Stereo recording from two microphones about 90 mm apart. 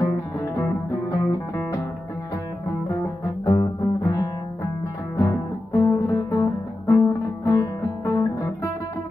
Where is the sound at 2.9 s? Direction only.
35° left (ahead or behind).